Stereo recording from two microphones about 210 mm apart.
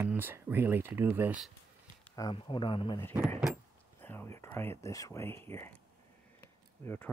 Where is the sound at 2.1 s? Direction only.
20° left (ahead or behind).